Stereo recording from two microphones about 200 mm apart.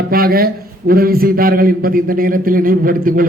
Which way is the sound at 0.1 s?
50° right (ahead or behind).